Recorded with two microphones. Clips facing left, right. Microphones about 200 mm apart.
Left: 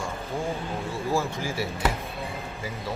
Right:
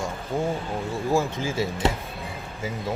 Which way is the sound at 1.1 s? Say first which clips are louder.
Right 3 dB; 15° right (ahead or behind).